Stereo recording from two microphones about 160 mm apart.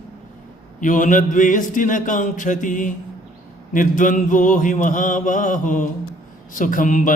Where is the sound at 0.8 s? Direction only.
55° left (ahead or behind).